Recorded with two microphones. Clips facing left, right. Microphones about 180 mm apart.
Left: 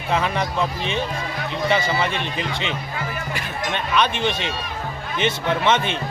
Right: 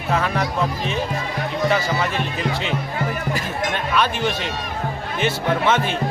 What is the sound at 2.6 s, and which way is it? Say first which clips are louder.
Speech: right 4 dB; 40° right (ahead or behind).